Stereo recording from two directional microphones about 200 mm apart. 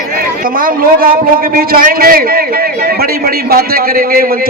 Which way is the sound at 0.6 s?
45° right (ahead or behind).